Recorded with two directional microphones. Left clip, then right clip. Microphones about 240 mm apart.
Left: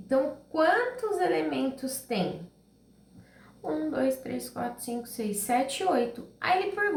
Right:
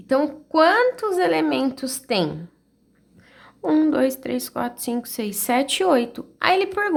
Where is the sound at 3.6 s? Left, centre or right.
Right.